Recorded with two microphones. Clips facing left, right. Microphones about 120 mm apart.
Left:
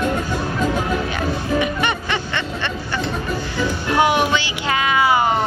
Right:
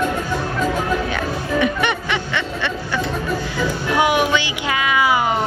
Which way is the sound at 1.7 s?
70° right (ahead or behind).